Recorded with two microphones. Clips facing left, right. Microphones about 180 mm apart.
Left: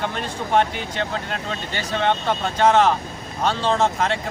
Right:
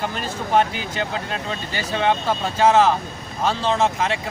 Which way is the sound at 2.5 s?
5° right (ahead or behind).